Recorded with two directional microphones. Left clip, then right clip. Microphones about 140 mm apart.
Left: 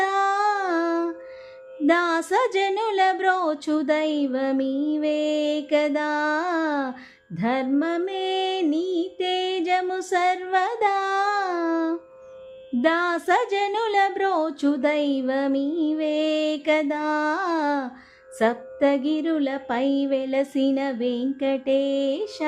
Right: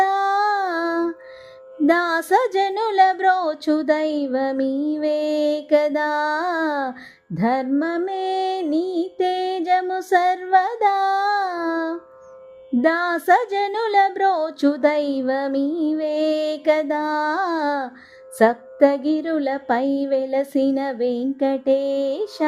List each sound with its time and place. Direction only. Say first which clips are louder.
0.0 s a sound: right 3 dB; 55° right (ahead or behind)
1.9 s music: right 3 dB; 55° right (ahead or behind)
4.6 s mantra: right 3 dB; 15° right (ahead or behind)
4.9 s music: right 1 dB; 50° right (ahead or behind)